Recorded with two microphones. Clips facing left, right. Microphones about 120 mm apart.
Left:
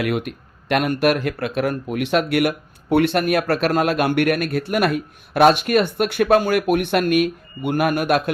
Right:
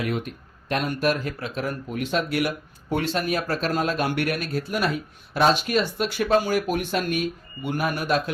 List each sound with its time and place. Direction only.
0.0 s speech: 70° left (ahead or behind)